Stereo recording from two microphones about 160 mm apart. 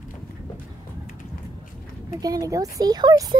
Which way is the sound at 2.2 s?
20° right (ahead or behind).